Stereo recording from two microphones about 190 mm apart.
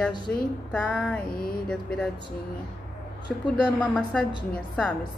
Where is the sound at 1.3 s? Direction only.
50° left (ahead or behind).